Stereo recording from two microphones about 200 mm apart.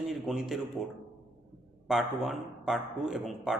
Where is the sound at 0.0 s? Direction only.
Centre (ahead or behind).